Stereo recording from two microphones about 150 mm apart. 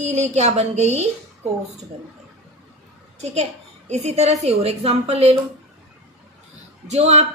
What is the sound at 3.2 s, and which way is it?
A child's voice, 45° right (ahead or behind).